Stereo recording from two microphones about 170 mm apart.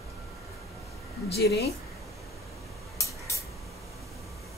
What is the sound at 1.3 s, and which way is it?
Speech, 70° left (ahead or behind).